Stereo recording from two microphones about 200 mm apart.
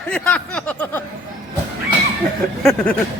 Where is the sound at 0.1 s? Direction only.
5° left (ahead or behind).